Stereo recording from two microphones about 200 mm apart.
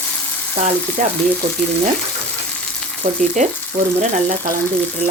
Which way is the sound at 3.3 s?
35° right (ahead or behind).